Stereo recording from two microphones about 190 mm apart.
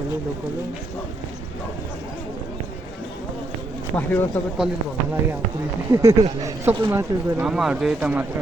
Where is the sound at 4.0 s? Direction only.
10° left (ahead or behind).